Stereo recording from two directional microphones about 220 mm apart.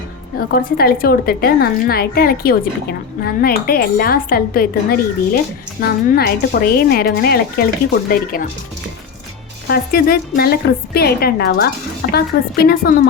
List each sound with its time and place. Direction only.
0.3 s a woman's voice: 40° left (ahead or behind)
9.6 s a woman's voice: 45° left (ahead or behind)